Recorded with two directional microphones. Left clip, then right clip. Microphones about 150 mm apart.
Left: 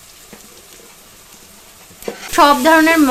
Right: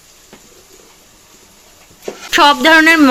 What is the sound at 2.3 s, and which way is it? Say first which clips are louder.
Speech: right 2 dB; 15° right (ahead or behind).